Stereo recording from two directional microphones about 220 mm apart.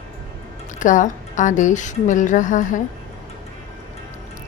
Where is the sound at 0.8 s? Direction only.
35° left (ahead or behind).